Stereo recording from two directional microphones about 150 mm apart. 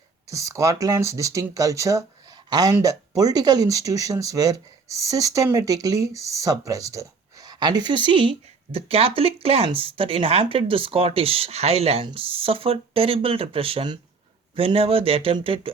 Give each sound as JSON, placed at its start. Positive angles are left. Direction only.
{"t": 0.3, "sound": "speech", "side_deg": -20}